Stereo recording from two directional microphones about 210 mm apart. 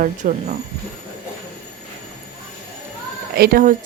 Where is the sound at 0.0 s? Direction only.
35° right (ahead or behind).